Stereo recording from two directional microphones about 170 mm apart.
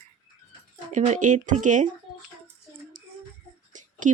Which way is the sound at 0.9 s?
45° right (ahead or behind).